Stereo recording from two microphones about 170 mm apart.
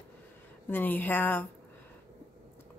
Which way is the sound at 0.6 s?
10° left (ahead or behind).